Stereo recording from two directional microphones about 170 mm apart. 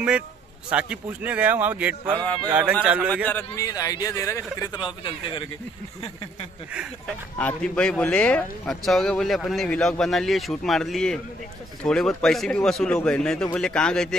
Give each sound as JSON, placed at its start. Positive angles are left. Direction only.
{"t": 0.7, "sound": "a man's voice", "side_deg": -5}
{"t": 3.3, "sound": "a man's voice", "side_deg": 15}
{"t": 7.3, "sound": "speech", "side_deg": 10}